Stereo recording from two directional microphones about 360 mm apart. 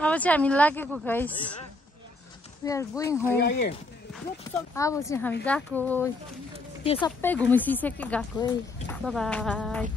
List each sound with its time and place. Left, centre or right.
0.0 s speech: centre
2.6 s speech: centre
3.3 s speech: left
4.1 s speech: centre